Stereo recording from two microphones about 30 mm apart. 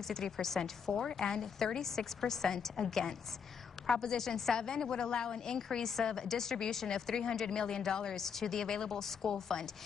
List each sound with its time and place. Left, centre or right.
0.1 s a woman's voice: centre